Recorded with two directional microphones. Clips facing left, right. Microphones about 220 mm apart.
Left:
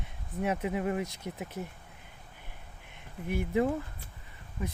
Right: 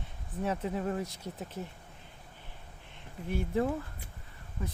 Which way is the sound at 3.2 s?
15° left (ahead or behind).